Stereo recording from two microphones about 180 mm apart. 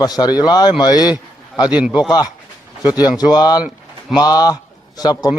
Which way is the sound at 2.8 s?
20° left (ahead or behind).